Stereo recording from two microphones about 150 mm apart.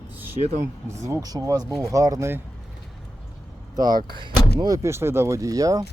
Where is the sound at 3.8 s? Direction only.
25° right (ahead or behind).